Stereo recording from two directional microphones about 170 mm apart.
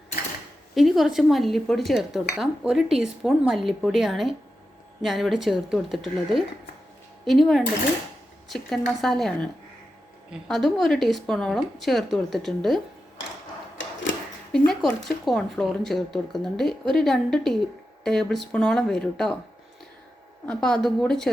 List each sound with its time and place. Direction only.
0.8 s speech: centre (ahead or behind)
7.3 s speech: centre (ahead or behind)
10.5 s speech: centre (ahead or behind)
13.7 s a sound: 90° left
14.5 s speech: 5° left (ahead or behind)
20.5 s speech: 5° left (ahead or behind)